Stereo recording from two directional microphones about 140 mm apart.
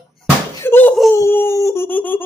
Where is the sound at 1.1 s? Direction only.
15° left (ahead or behind).